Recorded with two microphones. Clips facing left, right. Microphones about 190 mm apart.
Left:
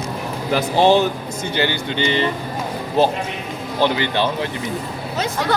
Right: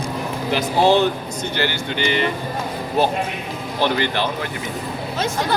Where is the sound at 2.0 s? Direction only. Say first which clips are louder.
Left 1 dB; 30° left (ahead or behind).